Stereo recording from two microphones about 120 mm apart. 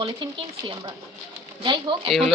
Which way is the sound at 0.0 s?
45° right (ahead or behind).